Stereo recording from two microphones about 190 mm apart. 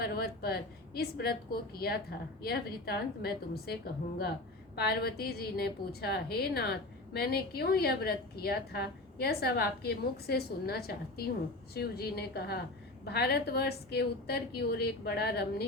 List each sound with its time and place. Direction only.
0.0 s a woman's voice: 55° left (ahead or behind)